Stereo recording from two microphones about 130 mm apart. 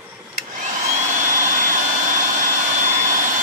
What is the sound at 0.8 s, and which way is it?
Jet engine, 75° right (ahead or behind).